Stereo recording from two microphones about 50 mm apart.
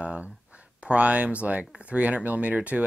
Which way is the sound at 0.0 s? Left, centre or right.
Right.